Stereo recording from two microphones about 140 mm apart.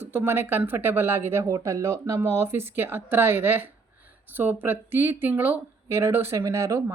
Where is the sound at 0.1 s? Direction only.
15° right (ahead or behind).